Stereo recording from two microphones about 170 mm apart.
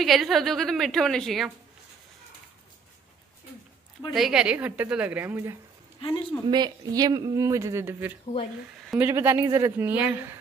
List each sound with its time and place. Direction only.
0.0 s a woman's voice: centre (ahead or behind)
4.1 s a woman's voice: 5° right (ahead or behind)
6.0 s speech: 30° left (ahead or behind)
6.4 s a woman's voice: 25° right (ahead or behind)